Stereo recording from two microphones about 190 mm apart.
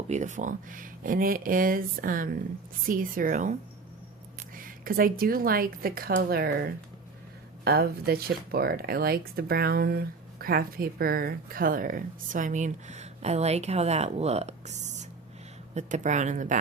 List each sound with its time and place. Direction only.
0.1 s speech: 40° right (ahead or behind)
15.7 s speech: 40° right (ahead or behind)